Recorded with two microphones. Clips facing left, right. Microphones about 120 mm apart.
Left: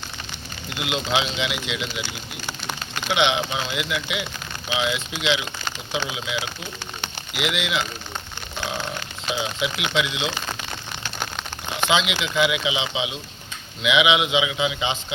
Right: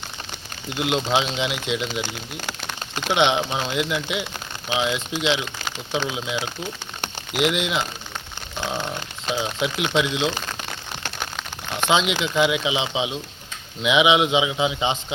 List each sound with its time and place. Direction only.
0.8 s speech: 40° right (ahead or behind)
5.9 s speech: 10° left (ahead or behind)
6.1 s speech: 40° right (ahead or behind)
9.6 s speech: 40° right (ahead or behind)
11.2 s a sound: centre (ahead or behind)
11.9 s speech: 40° right (ahead or behind)